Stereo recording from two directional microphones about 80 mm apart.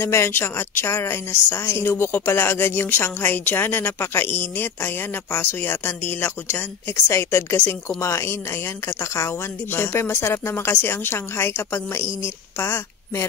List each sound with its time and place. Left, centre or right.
0.0 s a woman's voice: left